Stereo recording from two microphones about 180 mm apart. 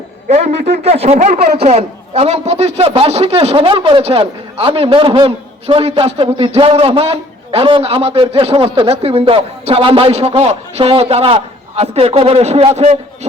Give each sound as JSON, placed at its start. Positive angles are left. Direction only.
{"t": 0.3, "sound": "a man's voice", "side_deg": -35}